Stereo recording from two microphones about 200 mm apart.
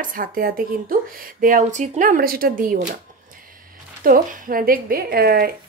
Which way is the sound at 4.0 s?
45° right (ahead or behind).